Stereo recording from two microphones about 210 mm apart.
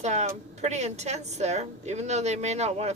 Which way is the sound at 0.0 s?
35° right (ahead or behind).